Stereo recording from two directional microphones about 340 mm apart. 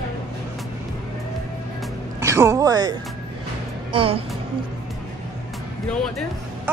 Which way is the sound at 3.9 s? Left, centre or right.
Centre.